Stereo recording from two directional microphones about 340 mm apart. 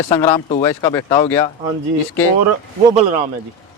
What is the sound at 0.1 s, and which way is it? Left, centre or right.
Speech, centre.